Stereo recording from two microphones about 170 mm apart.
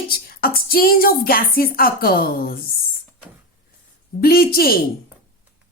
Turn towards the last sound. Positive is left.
turn(degrees=60)  # may be behind; listen again after turning